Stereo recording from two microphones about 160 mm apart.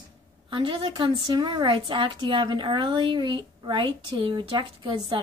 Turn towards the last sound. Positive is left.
turn(degrees=-30)  # may be behind; listen again after turning